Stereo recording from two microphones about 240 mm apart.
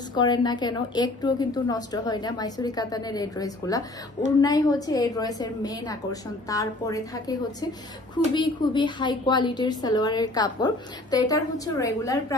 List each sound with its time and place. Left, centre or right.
0.1 s a woman's voice: centre
8.4 s a woman's voice: centre